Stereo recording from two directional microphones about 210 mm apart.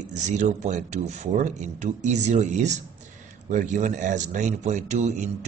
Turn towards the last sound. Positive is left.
turn(degrees=-35)  # may be behind; listen again after turning